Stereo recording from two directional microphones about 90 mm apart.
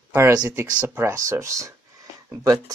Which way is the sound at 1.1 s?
35° right (ahead or behind).